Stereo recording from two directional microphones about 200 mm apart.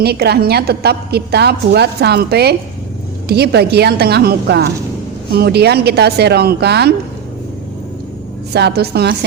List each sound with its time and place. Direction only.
0.0 s a woman's voice: 55° right (ahead or behind)
8.5 s speech: 55° right (ahead or behind)